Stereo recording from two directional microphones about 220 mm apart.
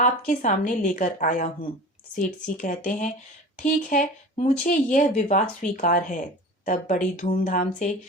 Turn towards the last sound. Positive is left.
turn(degrees=35)  # may be behind; listen again after turning